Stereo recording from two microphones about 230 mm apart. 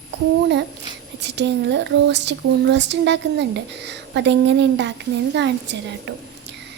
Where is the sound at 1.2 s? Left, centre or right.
Right.